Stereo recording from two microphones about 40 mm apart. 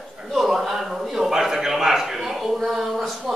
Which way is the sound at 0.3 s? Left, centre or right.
Centre.